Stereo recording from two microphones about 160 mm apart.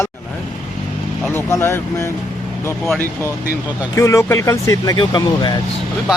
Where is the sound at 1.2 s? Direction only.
15° left (ahead or behind).